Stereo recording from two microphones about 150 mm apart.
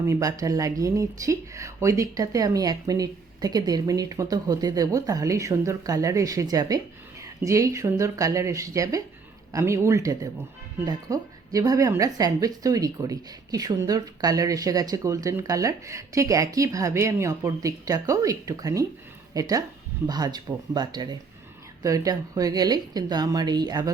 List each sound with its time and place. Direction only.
0.0 s speech: 20° right (ahead or behind)